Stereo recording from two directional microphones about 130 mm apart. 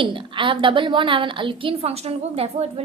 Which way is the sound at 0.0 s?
40° right (ahead or behind).